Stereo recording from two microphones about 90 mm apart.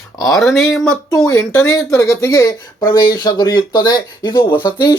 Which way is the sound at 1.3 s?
35° left (ahead or behind).